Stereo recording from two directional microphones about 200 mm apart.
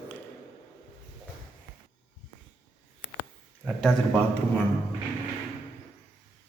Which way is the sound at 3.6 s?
Centre (ahead or behind).